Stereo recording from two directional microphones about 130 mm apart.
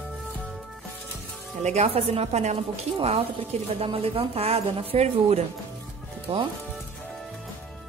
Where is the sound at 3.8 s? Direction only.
45° right (ahead or behind).